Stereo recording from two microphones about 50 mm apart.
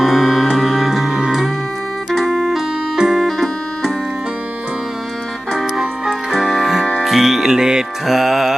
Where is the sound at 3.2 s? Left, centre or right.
Centre.